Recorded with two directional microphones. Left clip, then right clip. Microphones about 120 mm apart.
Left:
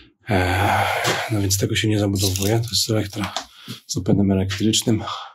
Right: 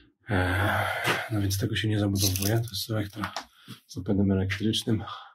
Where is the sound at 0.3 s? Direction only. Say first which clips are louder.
Left 7 dB; 35° left (ahead or behind).